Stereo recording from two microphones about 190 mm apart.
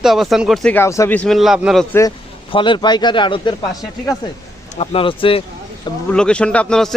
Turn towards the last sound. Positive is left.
turn(degrees=5)  # may be behind; listen again after turning